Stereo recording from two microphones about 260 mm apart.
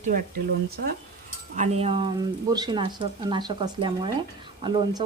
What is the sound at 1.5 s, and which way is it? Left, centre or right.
A woman's voice, right.